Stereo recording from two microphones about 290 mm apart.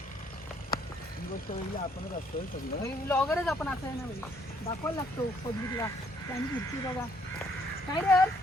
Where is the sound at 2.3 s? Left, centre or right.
Left.